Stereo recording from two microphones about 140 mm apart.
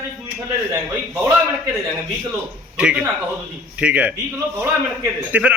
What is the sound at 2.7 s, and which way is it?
A man's voice, 5° right (ahead or behind).